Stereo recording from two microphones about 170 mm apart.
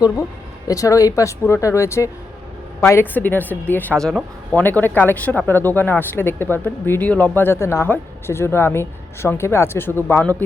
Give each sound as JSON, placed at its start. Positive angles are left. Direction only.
{"t": 0.7, "sound": "speech", "side_deg": 20}